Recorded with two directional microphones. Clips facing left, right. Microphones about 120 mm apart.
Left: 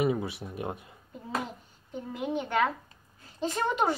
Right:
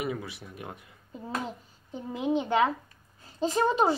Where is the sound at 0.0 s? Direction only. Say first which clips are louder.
Left 6 dB; 25° left (ahead or behind).